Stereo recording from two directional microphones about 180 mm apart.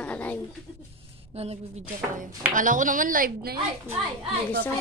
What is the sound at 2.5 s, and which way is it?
Speech, 45° right (ahead or behind).